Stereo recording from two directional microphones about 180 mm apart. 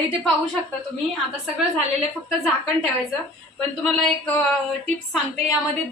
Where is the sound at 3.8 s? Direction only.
5° left (ahead or behind).